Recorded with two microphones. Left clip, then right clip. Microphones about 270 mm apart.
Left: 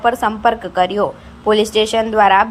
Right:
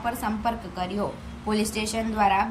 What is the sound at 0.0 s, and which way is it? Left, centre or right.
A woman's voice, left.